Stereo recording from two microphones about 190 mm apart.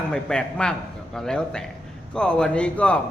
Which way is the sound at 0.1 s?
5° left (ahead or behind).